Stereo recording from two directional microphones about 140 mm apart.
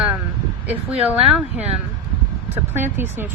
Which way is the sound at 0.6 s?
10° right (ahead or behind).